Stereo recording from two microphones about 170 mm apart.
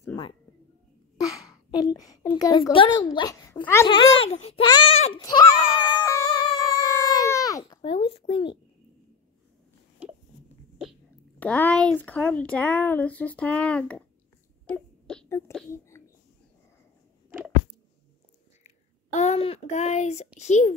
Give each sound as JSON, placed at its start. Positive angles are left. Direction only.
{"t": 0.0, "sound": "a sound", "side_deg": 20}
{"t": 1.2, "sound": "babbling", "side_deg": 20}
{"t": 2.7, "sound": "speech", "side_deg": 30}
{"t": 3.8, "sound": "a child's voice", "side_deg": 30}
{"t": 5.2, "sound": "a sound", "side_deg": 20}
{"t": 7.8, "sound": "a child's voice", "side_deg": 35}
{"t": 11.3, "sound": "speech", "side_deg": 10}
{"t": 14.7, "sound": "a sound", "side_deg": 5}
{"t": 15.2, "sound": "speech", "side_deg": 15}
{"t": 19.1, "sound": "a child's voice", "side_deg": 40}